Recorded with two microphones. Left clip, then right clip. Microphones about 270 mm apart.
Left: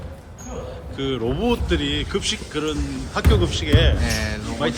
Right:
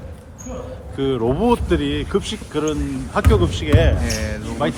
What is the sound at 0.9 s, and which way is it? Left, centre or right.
Speech, centre.